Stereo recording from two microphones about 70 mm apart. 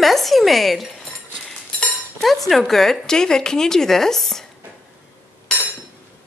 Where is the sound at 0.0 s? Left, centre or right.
Centre.